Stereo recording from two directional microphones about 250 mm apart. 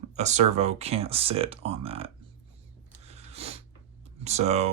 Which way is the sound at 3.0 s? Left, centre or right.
Right.